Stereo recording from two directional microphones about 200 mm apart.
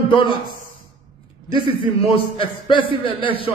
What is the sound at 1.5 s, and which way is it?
A man's voice, 25° left (ahead or behind).